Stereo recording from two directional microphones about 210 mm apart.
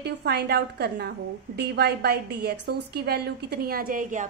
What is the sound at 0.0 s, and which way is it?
A woman's voice, 50° right (ahead or behind).